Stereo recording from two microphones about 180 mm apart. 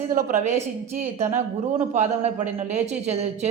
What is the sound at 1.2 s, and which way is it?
A man's voice, 40° right (ahead or behind).